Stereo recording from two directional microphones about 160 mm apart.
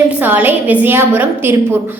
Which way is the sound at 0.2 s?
10° right (ahead or behind).